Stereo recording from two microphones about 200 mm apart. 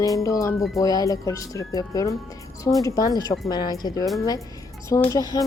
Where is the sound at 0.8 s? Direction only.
20° left (ahead or behind).